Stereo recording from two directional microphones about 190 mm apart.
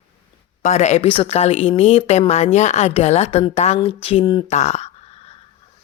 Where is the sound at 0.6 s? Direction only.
35° left (ahead or behind).